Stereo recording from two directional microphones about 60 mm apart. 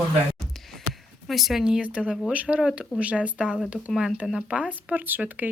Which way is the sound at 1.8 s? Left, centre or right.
Right.